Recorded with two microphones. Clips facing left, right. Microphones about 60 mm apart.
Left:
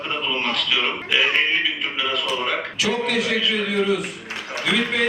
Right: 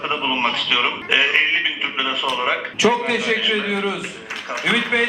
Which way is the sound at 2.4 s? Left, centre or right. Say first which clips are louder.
Right 5 dB; right.